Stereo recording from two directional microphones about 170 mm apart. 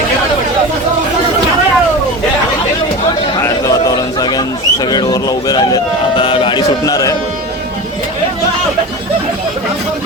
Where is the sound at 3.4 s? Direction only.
20° left (ahead or behind).